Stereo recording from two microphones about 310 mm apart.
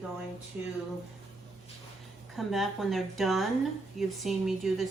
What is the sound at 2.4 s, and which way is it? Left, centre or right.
Speech, centre.